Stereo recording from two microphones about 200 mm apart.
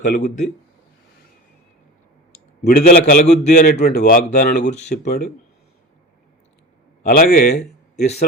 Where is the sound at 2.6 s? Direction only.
50° left (ahead or behind).